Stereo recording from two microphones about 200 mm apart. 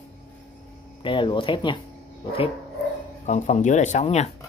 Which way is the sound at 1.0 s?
25° left (ahead or behind).